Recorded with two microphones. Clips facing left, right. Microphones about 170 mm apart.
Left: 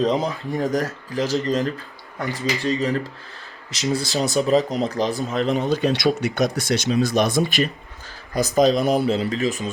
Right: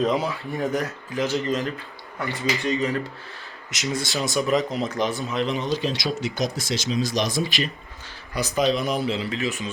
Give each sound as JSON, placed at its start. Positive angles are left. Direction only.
{"t": 0.0, "sound": "speech", "side_deg": 40}
{"t": 5.8, "sound": "speech", "side_deg": 60}
{"t": 8.3, "sound": "speech", "side_deg": 40}